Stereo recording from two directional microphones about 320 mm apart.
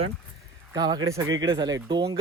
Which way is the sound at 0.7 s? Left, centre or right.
Centre.